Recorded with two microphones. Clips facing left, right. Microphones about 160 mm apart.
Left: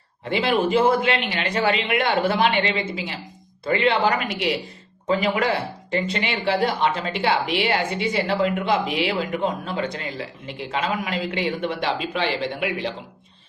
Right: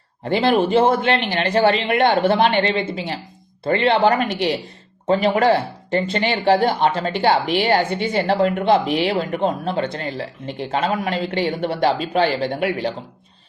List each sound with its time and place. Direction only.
0.3 s speech: 35° right (ahead or behind)